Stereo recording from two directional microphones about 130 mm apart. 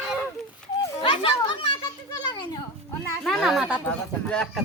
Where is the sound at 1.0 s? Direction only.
40° left (ahead or behind).